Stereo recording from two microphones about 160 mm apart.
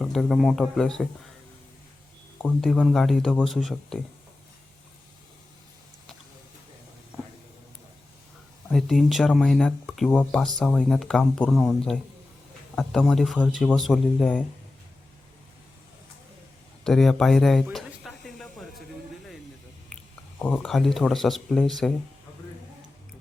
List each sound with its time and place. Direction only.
0.0 s speech: centre (ahead or behind)
2.4 s speech: centre (ahead or behind)
8.7 s speech: centre (ahead or behind)
16.8 s a sound: centre (ahead or behind)
20.4 s speech: 5° left (ahead or behind)